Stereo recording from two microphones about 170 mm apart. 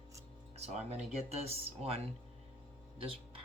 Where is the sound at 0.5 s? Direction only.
40° right (ahead or behind).